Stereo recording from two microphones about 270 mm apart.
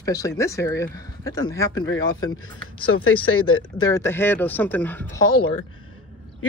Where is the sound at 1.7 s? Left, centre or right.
Left.